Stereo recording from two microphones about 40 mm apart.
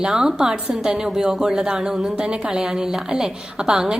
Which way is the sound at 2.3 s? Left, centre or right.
Right.